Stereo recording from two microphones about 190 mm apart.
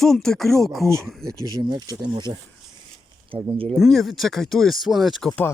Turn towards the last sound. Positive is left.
turn(degrees=0)  # may be behind; listen again after turning